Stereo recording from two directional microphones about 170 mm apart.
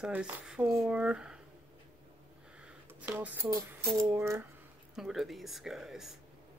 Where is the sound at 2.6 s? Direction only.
10° right (ahead or behind).